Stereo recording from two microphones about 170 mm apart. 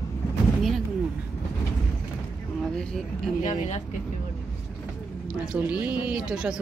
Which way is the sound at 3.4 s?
45° left (ahead or behind).